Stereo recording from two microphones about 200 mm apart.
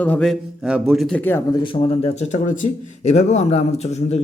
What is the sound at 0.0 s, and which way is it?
A man's voice, 5° left (ahead or behind).